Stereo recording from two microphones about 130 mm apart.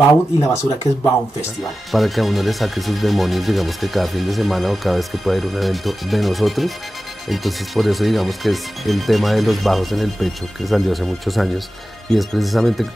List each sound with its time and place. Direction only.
0.1 s speech: 25° left (ahead or behind)
1.9 s speech: centre (ahead or behind)